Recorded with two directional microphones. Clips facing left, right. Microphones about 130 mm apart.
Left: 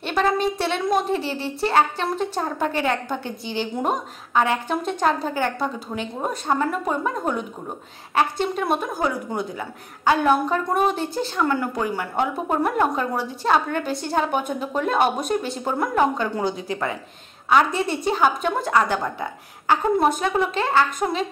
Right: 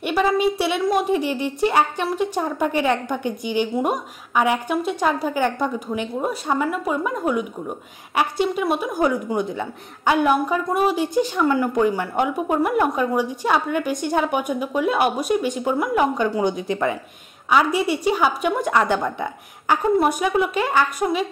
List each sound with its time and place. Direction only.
0.0 s speech: 10° right (ahead or behind)
17.5 s speech: 10° right (ahead or behind)